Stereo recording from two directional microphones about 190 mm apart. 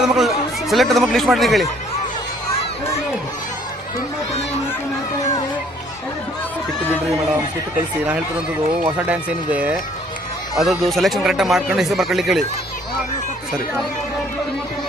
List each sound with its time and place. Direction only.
0.0 s speech: centre (ahead or behind)
8.8 s speech: 10° right (ahead or behind)